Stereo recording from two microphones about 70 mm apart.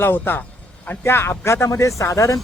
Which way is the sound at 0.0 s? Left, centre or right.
Left.